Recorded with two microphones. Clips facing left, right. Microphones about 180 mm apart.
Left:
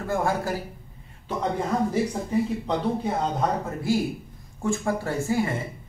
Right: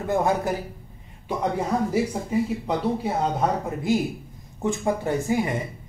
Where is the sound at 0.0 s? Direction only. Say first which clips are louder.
Right 3 dB; 20° right (ahead or behind).